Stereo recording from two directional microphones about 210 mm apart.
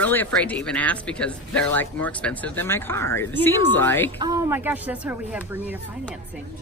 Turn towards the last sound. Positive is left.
turn(degrees=-10)  # may be behind; listen again after turning